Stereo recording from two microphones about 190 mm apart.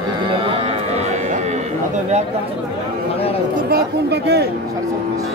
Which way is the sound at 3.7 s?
55° right (ahead or behind).